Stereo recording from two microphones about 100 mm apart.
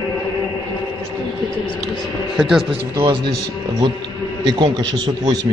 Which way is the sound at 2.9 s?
50° right (ahead or behind).